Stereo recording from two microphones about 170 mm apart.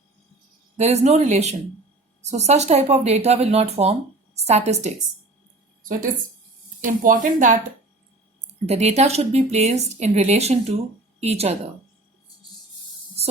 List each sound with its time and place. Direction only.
0.8 s speech: 40° right (ahead or behind)
5.8 s a woman's voice: 55° right (ahead or behind)
8.6 s speech: 40° right (ahead or behind)